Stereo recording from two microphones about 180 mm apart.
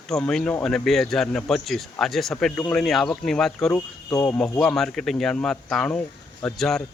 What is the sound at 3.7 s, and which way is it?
Speech, 15° left (ahead or behind).